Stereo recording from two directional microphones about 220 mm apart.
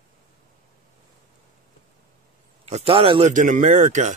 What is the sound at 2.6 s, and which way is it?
Speech, 25° right (ahead or behind).